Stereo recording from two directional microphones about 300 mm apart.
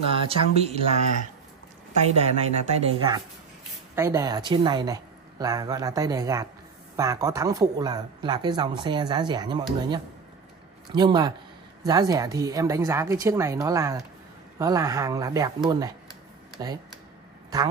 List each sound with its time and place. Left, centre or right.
0.0 s speech: centre
2.1 s speech: right